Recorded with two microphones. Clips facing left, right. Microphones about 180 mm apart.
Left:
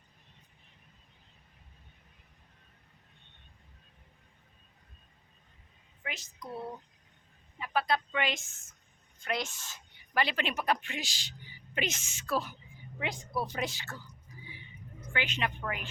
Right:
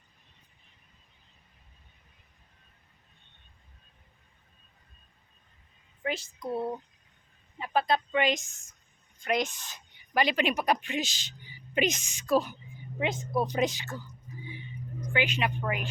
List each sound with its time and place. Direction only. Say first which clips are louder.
6.0 s a woman's voice: right 9 dB; 30° right (ahead or behind)
15.1 s a woman's voice: right 5 dB; 10° right (ahead or behind)